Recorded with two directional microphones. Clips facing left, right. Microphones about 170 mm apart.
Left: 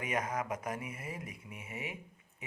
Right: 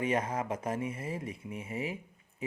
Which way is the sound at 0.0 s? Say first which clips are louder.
Right 4 dB; 30° right (ahead or behind).